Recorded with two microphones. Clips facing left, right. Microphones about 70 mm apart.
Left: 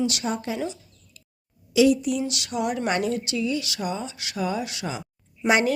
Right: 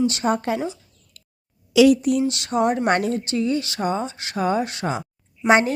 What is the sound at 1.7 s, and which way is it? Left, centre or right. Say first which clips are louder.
Speech: right 4 dB; right.